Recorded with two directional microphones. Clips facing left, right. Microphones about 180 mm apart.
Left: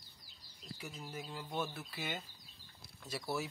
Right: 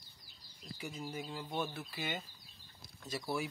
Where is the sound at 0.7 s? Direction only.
5° right (ahead or behind).